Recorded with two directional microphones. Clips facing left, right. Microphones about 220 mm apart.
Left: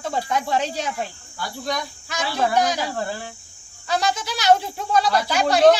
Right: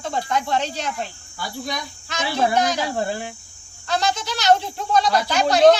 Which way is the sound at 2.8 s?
15° right (ahead or behind).